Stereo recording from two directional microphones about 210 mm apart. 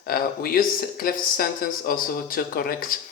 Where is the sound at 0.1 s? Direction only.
45° left (ahead or behind).